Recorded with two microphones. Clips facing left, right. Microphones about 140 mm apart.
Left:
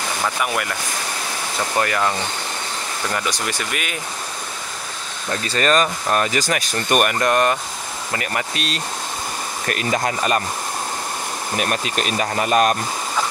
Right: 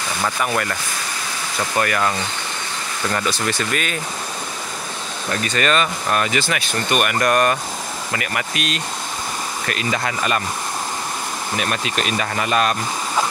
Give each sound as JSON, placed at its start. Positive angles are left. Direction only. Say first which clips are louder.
{"t": 0.4, "sound": "speech", "louder": "right 1 dB", "side_deg": 10}
{"t": 1.8, "sound": "speech", "louder": "even", "side_deg": 15}
{"t": 5.3, "sound": "speech", "louder": "left 1 dB", "side_deg": 30}
{"t": 7.2, "sound": "speech", "louder": "right 1 dB", "side_deg": 20}
{"t": 8.1, "sound": "speech", "louder": "left 1 dB", "side_deg": 30}
{"t": 9.7, "sound": "speech", "louder": "left 3 dB", "side_deg": 45}
{"t": 11.5, "sound": "speech", "louder": "left 1 dB", "side_deg": 40}